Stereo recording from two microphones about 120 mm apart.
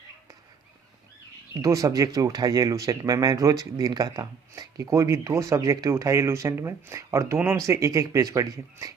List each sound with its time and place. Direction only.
1.5 s speech: 30° right (ahead or behind)